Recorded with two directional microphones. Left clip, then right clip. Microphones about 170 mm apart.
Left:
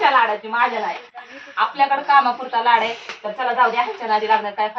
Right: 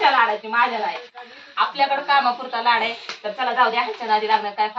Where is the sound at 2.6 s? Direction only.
5° right (ahead or behind).